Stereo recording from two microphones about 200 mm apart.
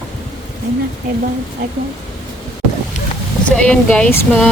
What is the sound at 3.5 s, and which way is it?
Speech, 5° left (ahead or behind).